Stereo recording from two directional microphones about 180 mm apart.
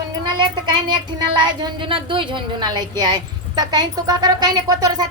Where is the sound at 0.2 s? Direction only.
25° right (ahead or behind).